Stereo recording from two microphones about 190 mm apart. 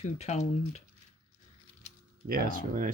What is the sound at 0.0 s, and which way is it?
Speech, 35° left (ahead or behind).